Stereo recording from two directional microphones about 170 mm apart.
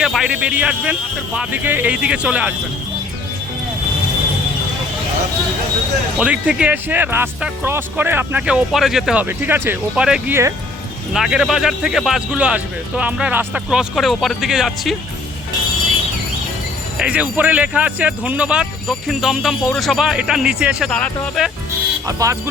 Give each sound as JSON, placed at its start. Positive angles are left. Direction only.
{"t": 0.0, "sound": "speech", "side_deg": 0}
{"t": 6.1, "sound": "speech", "side_deg": -10}
{"t": 17.0, "sound": "speech", "side_deg": -5}
{"t": 22.0, "sound": "speech", "side_deg": -20}